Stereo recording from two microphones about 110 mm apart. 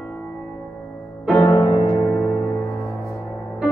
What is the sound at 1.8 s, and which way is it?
Music, 45° left (ahead or behind).